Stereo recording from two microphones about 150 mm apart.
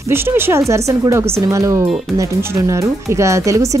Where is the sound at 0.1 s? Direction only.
15° right (ahead or behind).